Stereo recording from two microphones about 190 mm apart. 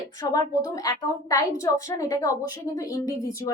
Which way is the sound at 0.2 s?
20° left (ahead or behind).